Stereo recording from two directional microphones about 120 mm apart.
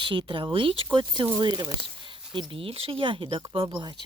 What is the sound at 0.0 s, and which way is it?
Speech, 45° right (ahead or behind).